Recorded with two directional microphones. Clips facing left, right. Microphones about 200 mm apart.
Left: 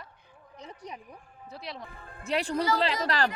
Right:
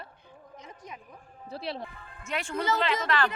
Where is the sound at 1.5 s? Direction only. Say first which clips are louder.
Right 5 dB; 30° right (ahead or behind).